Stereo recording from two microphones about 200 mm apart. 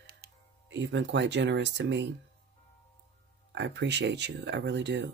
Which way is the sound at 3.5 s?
65° right (ahead or behind).